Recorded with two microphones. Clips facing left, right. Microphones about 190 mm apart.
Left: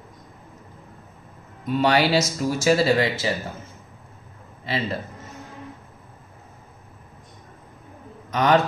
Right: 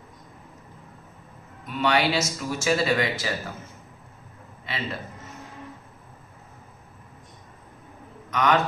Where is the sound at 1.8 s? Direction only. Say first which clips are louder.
Left 3 dB; 35° left (ahead or behind).